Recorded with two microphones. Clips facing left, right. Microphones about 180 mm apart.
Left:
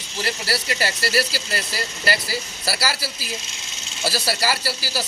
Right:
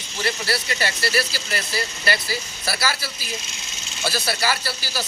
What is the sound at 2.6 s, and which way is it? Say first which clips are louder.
A man's voice: even; 35° left (ahead or behind).